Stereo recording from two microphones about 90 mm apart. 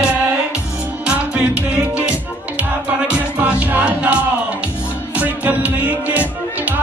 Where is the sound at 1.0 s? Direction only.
15° right (ahead or behind).